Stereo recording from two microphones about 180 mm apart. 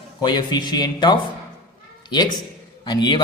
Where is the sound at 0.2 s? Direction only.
25° left (ahead or behind).